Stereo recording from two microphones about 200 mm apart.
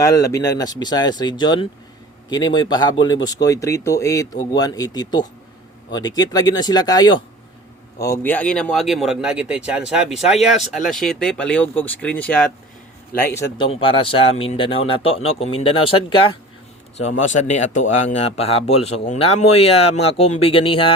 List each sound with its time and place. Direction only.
0.0 s speech: 15° left (ahead or behind)
13.7 s speech: 25° left (ahead or behind)
17.0 s speech: 35° left (ahead or behind)